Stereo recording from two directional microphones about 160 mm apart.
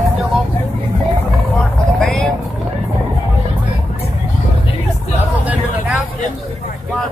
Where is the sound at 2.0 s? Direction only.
5° left (ahead or behind).